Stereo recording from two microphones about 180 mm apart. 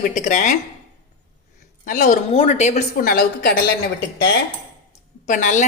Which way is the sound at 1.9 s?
50° left (ahead or behind).